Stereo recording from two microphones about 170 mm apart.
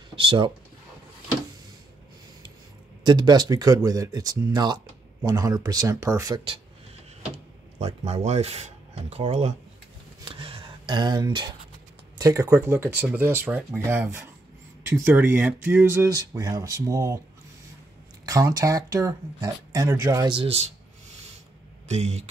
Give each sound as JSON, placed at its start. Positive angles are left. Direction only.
{"t": 0.1, "sound": "speech", "side_deg": -30}
{"t": 3.0, "sound": "speech", "side_deg": -25}
{"t": 7.8, "sound": "speech", "side_deg": -40}
{"t": 10.2, "sound": "a sound", "side_deg": -30}
{"t": 12.2, "sound": "speech", "side_deg": -20}
{"t": 18.2, "sound": "speech", "side_deg": -20}
{"t": 21.8, "sound": "speech", "side_deg": -40}